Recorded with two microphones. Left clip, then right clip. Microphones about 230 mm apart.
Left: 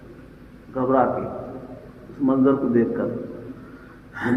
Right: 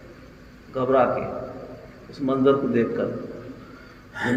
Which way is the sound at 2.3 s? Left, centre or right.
Right.